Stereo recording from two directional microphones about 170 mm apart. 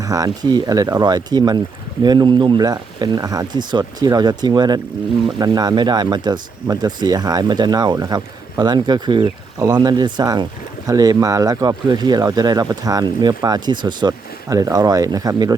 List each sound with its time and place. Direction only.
0.0 s speech: 20° right (ahead or behind)